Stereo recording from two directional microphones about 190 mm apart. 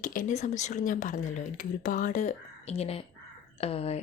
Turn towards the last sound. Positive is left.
turn(degrees=30)  # may be behind; listen again after turning